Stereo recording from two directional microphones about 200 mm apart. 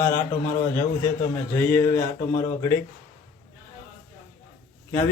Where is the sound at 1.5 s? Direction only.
10° left (ahead or behind).